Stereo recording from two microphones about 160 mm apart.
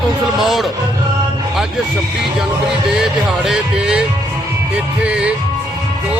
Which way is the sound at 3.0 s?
5° right (ahead or behind).